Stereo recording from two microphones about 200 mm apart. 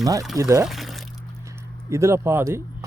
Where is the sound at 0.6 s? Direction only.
Centre (ahead or behind).